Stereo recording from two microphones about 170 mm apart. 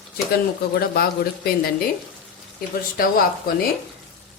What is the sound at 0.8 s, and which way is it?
Speech, 65° left (ahead or behind).